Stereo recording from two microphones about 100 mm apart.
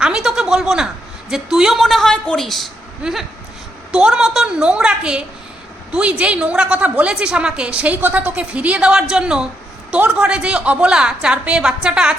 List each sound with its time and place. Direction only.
0.0 s a woman's voice: 5° right (ahead or behind)